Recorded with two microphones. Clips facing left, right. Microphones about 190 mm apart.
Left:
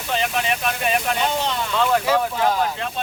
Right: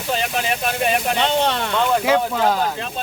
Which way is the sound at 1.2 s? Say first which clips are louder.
Right 4 dB; 70° right (ahead or behind).